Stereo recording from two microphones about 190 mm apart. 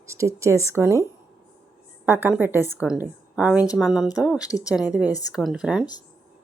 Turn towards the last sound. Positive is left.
turn(degrees=-5)  # may be behind; listen again after turning